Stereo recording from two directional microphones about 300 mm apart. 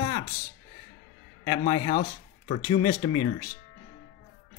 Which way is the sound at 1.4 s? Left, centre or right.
Centre.